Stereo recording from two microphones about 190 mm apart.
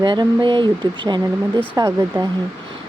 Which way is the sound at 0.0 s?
25° right (ahead or behind).